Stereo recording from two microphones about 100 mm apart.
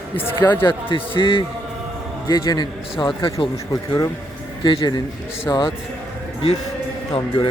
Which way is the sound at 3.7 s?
35° left (ahead or behind).